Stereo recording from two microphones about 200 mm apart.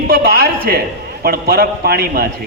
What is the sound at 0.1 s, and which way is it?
A man's voice, 50° right (ahead or behind).